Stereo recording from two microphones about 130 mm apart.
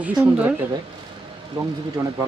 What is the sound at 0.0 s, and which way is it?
Speech, 10° right (ahead or behind).